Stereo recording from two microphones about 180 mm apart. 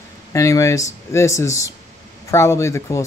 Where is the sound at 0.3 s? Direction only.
15° left (ahead or behind).